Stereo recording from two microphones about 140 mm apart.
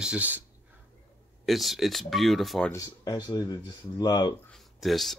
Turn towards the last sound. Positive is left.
turn(degrees=0)  # may be behind; listen again after turning